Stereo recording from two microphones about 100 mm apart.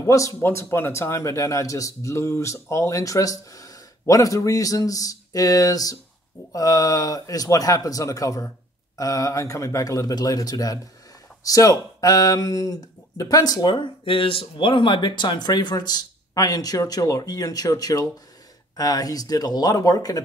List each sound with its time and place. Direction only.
0.0 s speech: 35° left (ahead or behind)